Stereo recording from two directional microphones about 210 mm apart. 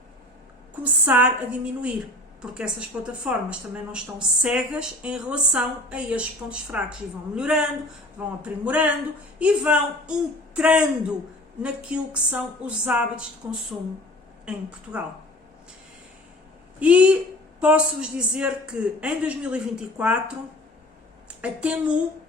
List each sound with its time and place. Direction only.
0.8 s a woman's voice: 10° right (ahead or behind)
16.8 s a woman's voice: 5° right (ahead or behind)
21.4 s a woman's voice: 5° right (ahead or behind)